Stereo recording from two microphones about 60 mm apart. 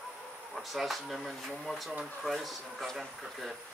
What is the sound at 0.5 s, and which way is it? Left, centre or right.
Speech, centre.